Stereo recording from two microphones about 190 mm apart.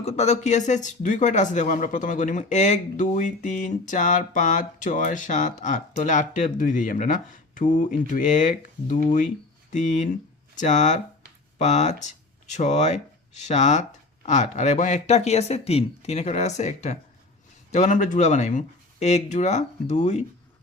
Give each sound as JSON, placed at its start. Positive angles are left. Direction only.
{"t": 0.0, "sound": "speech", "side_deg": 35}